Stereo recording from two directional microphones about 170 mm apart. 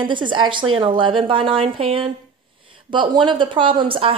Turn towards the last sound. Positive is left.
turn(degrees=-30)  # may be behind; listen again after turning